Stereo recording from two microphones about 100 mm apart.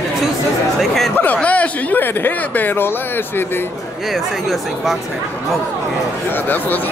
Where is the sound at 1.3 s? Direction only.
15° left (ahead or behind).